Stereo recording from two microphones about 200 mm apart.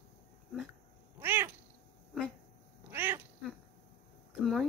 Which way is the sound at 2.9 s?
10° right (ahead or behind).